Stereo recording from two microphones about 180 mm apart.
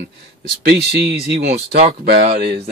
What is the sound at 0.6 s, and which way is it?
Speech, 65° right (ahead or behind).